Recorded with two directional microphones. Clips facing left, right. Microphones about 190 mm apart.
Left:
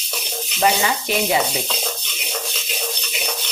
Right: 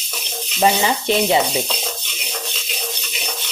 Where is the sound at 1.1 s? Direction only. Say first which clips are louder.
Right 6 dB; 25° right (ahead or behind).